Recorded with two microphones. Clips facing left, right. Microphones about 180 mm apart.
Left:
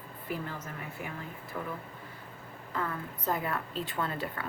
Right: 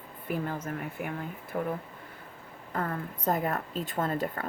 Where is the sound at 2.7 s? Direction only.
45° right (ahead or behind).